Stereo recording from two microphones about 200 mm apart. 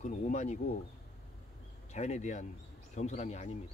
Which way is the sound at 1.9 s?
35° left (ahead or behind).